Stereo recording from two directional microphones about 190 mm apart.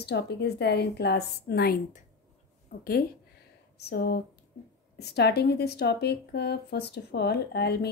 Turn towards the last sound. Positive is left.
turn(degrees=60)  # may be behind; listen again after turning